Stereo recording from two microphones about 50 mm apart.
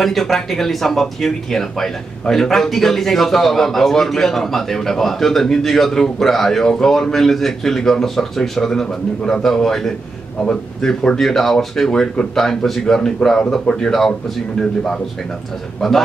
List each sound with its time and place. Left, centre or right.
0.0 s speech: centre
15.8 s speech: centre